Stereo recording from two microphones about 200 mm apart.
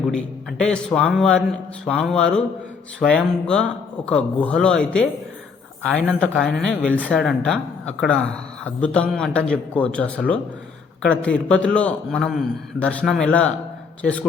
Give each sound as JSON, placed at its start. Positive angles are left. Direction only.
{"t": 0.1, "sound": "speech", "side_deg": 5}